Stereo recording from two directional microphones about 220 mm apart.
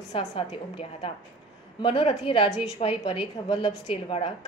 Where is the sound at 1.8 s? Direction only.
25° left (ahead or behind).